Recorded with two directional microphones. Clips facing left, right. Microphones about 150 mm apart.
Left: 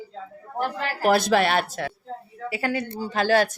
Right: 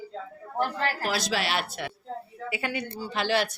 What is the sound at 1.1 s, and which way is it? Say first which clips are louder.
A woman's voice: left 14 dB; 55° left (ahead or behind).